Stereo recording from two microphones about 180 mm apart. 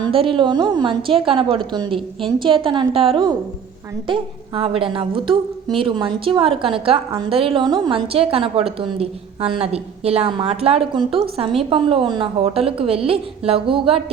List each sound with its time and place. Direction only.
0.0 s a woman's voice: 30° right (ahead or behind)